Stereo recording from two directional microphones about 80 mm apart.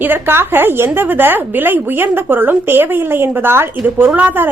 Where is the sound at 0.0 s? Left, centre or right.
Right.